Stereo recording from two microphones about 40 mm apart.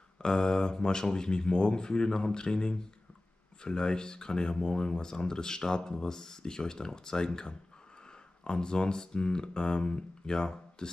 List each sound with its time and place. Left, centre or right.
0.2 s speech: centre